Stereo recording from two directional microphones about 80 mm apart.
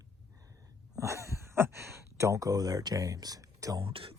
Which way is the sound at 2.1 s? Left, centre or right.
Right.